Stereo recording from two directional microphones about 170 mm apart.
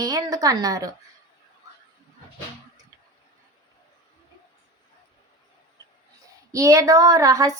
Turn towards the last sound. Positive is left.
turn(degrees=-20)  # may be behind; listen again after turning